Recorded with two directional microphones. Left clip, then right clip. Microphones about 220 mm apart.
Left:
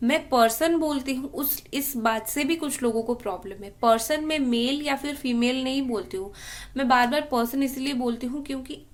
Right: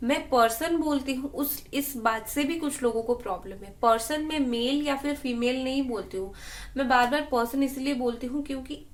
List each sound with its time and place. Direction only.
0.0 s a woman's voice: 45° left (ahead or behind)